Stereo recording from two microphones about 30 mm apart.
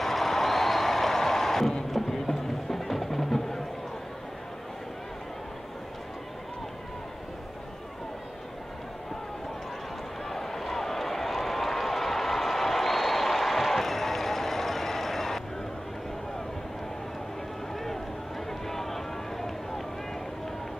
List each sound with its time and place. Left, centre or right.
0.0 s music: centre
10.3 s a sound: centre
18.5 s run: centre